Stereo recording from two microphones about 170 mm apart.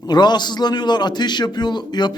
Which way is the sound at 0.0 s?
25° left (ahead or behind).